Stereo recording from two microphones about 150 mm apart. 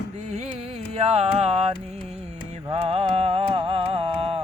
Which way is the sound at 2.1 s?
45° right (ahead or behind).